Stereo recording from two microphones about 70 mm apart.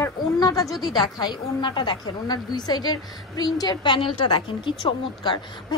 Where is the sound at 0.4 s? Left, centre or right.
Left.